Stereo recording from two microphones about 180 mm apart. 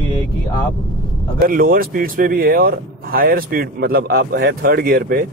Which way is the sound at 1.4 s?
50° right (ahead or behind).